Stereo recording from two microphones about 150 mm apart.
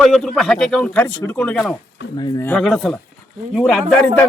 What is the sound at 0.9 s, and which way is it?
Speech, 15° left (ahead or behind).